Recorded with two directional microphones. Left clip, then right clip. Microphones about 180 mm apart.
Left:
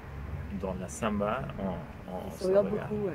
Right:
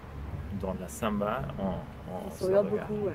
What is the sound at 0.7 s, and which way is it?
Speech, 25° right (ahead or behind).